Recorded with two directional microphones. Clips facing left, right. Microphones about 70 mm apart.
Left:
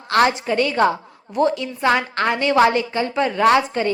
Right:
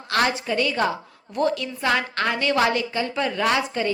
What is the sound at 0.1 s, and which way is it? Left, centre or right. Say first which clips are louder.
Speech: left 5 dB; left.